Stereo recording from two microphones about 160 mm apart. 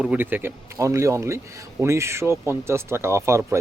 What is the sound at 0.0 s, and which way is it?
Speech, 10° right (ahead or behind).